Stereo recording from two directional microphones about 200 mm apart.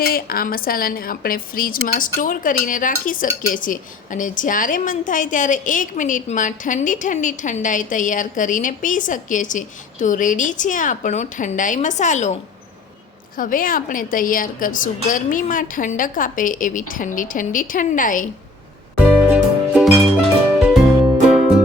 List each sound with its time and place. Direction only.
0.0 s a woman's voice: 45° left (ahead or behind)
19.3 s music: 5° right (ahead or behind)